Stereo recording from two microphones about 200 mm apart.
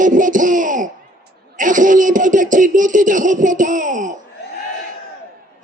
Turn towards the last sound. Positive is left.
turn(degrees=-40)  # may be behind; listen again after turning